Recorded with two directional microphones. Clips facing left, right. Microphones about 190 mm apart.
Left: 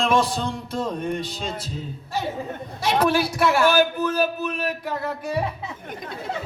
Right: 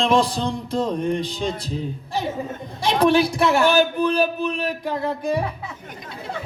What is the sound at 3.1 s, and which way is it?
Speech, 20° right (ahead or behind).